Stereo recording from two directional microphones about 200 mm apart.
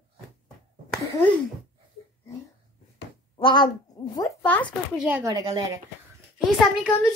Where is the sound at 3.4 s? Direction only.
25° left (ahead or behind).